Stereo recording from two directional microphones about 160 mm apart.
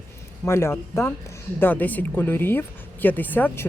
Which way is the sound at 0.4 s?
15° left (ahead or behind).